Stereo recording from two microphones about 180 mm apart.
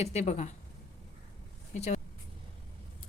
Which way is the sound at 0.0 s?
35° left (ahead or behind).